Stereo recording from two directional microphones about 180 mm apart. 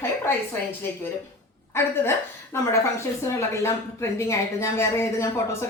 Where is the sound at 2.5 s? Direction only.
15° left (ahead or behind).